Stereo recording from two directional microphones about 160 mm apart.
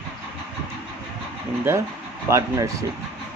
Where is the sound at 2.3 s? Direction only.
20° right (ahead or behind).